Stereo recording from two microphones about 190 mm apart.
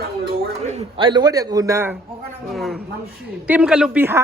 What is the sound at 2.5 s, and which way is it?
Speech, centre (ahead or behind).